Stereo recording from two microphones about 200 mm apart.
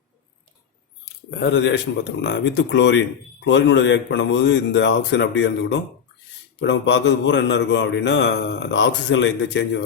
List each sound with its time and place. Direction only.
1.3 s a man's voice: 60° left (ahead or behind)